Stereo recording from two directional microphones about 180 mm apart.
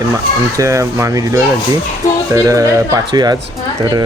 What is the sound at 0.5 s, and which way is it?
Speech, 15° right (ahead or behind).